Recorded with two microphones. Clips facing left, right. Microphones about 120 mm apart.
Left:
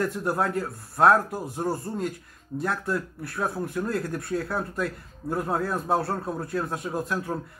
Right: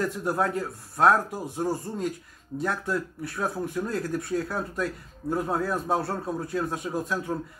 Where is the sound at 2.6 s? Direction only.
Centre (ahead or behind).